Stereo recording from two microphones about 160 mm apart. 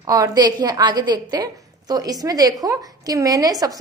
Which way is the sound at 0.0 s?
20° right (ahead or behind).